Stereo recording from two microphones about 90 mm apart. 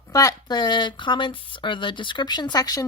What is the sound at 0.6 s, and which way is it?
Speech, 55° left (ahead or behind).